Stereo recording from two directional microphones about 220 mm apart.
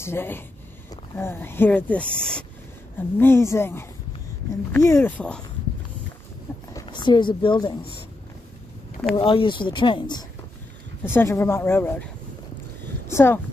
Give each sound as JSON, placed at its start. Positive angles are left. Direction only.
{"t": 0.0, "sound": "speech", "side_deg": 10}
{"t": 6.7, "sound": "speech", "side_deg": 20}
{"t": 9.1, "sound": "speech", "side_deg": 25}
{"t": 13.1, "sound": "speech", "side_deg": 10}